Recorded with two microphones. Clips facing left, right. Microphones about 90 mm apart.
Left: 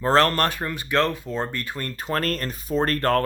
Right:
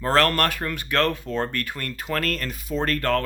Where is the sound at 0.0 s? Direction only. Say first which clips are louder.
Left 1 dB; 30° left (ahead or behind).